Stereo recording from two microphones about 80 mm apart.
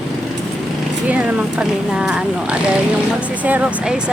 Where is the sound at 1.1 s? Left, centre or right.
Centre.